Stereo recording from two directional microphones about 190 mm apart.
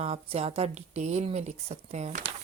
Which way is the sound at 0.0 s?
30° right (ahead or behind).